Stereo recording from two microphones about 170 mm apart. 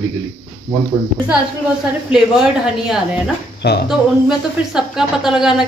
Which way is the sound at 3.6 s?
75° left (ahead or behind).